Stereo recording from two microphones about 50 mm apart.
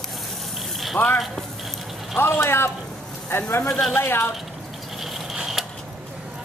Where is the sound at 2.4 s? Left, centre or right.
Left.